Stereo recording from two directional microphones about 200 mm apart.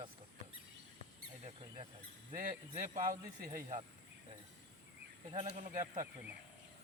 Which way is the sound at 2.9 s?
40° right (ahead or behind).